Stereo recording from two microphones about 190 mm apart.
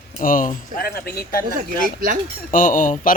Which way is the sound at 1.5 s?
45° right (ahead or behind).